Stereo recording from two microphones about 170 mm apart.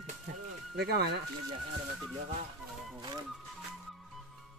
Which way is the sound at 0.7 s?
75° right (ahead or behind).